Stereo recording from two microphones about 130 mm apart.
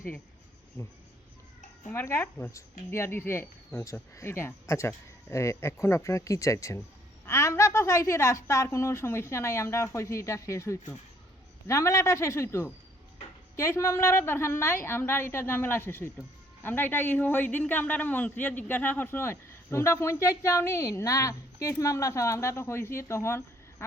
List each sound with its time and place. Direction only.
1.9 s a man's voice: 15° left (ahead or behind)